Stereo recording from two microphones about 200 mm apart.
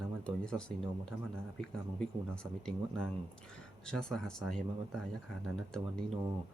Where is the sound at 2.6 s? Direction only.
5° left (ahead or behind).